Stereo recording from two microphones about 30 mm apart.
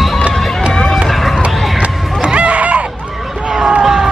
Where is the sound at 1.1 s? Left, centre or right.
Centre.